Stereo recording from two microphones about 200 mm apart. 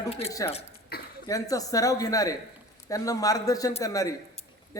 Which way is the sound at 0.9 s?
50° left (ahead or behind).